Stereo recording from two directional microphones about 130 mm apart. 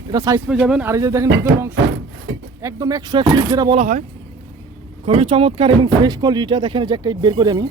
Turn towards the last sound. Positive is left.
turn(degrees=-30)  # may be behind; listen again after turning